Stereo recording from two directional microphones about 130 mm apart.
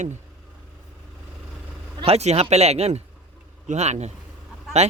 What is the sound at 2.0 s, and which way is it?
Speech, 50° right (ahead or behind).